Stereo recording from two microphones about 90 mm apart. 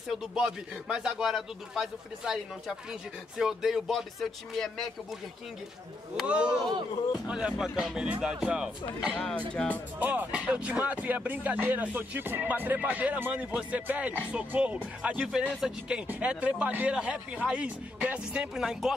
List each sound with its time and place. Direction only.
0.1 s speech: 5° right (ahead or behind)
6.2 s speech: 10° right (ahead or behind)
9.5 s speech: 10° left (ahead or behind)
9.9 s speech: 20° right (ahead or behind)